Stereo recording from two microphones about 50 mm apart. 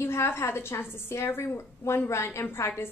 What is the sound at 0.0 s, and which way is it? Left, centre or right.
A woman's voice, left.